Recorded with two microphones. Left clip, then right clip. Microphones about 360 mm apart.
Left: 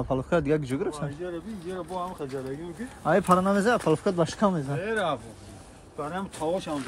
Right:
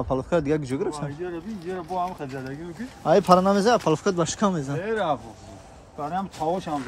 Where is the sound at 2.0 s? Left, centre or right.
Right.